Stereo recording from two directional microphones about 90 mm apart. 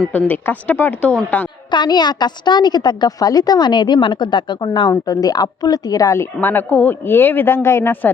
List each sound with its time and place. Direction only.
0.1 s speech: 15° left (ahead or behind)
1.7 s a woman's voice: 55° left (ahead or behind)
4.9 s a woman's voice: 40° left (ahead or behind)
6.4 s speech: 20° left (ahead or behind)